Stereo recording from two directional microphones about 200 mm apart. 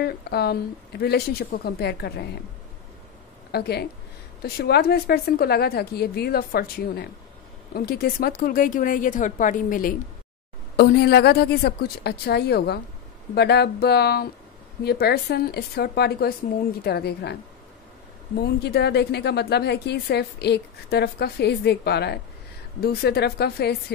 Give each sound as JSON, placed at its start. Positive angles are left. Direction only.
{"t": 0.0, "sound": "a woman's voice", "side_deg": 50}
{"t": 3.5, "sound": "a woman's voice", "side_deg": 55}
{"t": 18.4, "sound": "a woman's voice", "side_deg": 55}